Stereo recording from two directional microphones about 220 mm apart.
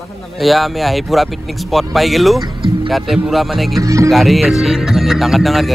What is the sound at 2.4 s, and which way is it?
Speech, 20° right (ahead or behind).